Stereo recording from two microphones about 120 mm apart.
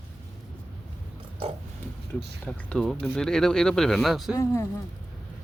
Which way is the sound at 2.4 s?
5° left (ahead or behind).